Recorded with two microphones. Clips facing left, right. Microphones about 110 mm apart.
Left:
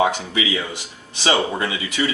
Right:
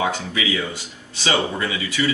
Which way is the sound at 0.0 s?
20° left (ahead or behind).